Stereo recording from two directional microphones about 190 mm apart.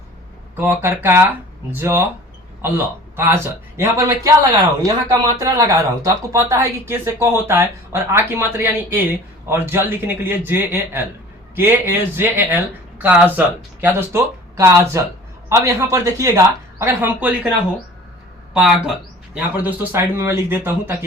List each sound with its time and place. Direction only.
0.5 s a woman's voice: 10° right (ahead or behind)
18.5 s a woman's voice: 5° right (ahead or behind)